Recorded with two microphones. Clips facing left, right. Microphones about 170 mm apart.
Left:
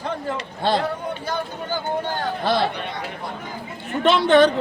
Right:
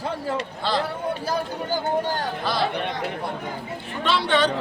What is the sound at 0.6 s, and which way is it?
Speech, 55° left (ahead or behind).